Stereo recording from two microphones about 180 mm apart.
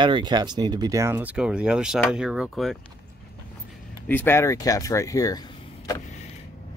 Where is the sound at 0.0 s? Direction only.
25° right (ahead or behind); by 2.8 s centre (ahead or behind).